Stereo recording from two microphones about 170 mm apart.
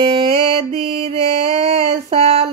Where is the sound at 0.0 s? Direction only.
35° right (ahead or behind).